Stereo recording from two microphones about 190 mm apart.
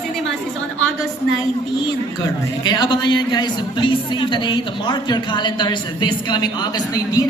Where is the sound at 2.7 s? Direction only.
25° left (ahead or behind).